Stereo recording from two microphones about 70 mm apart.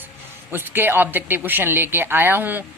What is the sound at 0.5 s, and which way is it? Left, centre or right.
Speech, right.